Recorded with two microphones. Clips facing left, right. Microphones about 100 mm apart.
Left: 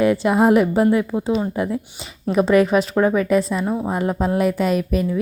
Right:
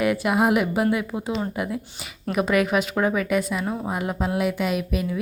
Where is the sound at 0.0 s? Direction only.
30° left (ahead or behind).